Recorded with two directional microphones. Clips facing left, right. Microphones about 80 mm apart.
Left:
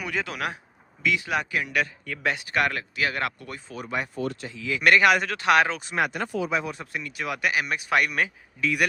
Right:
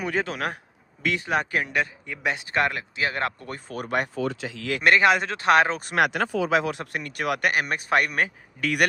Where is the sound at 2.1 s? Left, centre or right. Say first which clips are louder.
Even; centre.